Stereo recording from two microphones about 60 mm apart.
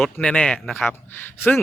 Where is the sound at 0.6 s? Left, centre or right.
Centre.